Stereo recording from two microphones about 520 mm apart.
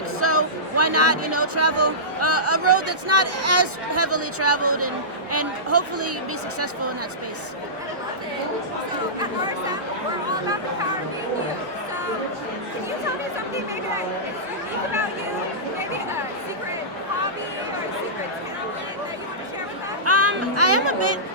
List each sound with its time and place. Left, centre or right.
0.2 s speech: right
20.1 s speech: right